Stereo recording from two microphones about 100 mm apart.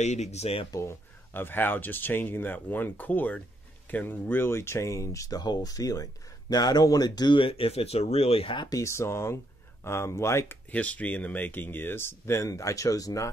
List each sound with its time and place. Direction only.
0.2 s speech: 90° left
0.7 s speech: 30° left (ahead or behind)
7.3 s speech: 65° left (ahead or behind)
8.5 s speech: 35° left (ahead or behind)
10.7 s speech: 15° left (ahead or behind); by 13.3 s 35° left (ahead or behind)